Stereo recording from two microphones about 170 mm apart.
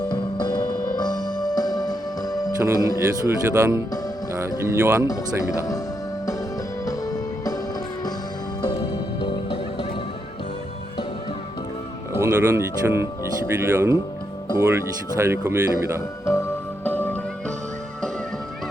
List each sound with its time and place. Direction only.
0.1 s music: 25° left (ahead or behind)
2.7 s speech: 20° left (ahead or behind)
3.2 s a man's voice: 15° right (ahead or behind)
6.8 s music: 20° left (ahead or behind)
8.6 s music: 30° left (ahead or behind)
12.1 s a man's voice: 15° right (ahead or behind)
16.2 s music: 15° left (ahead or behind)